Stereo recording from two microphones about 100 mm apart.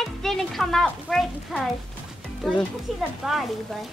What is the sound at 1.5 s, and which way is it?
Speech, centre (ahead or behind).